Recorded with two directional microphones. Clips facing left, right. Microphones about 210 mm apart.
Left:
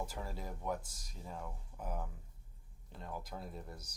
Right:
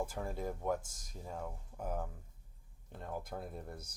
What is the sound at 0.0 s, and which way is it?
Speech, 50° right (ahead or behind).